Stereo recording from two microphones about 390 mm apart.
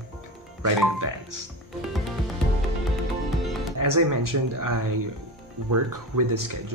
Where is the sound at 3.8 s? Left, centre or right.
Right.